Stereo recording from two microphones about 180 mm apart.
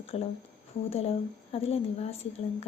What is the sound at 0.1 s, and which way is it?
A woman's voice, 35° left (ahead or behind).